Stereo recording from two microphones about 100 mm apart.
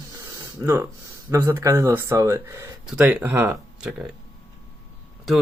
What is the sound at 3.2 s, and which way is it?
Speech, 20° right (ahead or behind).